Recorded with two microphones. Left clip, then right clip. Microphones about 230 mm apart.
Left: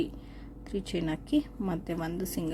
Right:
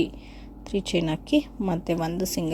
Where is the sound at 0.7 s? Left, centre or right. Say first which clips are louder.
Right 7 dB; centre.